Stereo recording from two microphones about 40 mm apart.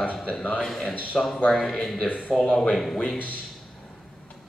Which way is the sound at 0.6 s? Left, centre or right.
Centre.